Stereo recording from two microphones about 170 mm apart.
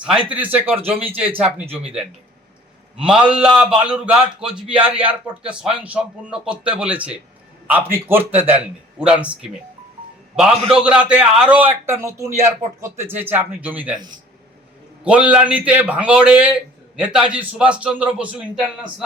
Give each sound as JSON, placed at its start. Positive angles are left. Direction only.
{"t": 0.3, "sound": "a man's voice", "side_deg": -10}
{"t": 0.8, "sound": "speech", "side_deg": -35}
{"t": 1.2, "sound": "a man's voice", "side_deg": -10}
{"t": 3.0, "sound": "a man's voice", "side_deg": -5}
{"t": 15.0, "sound": "a man's voice", "side_deg": -10}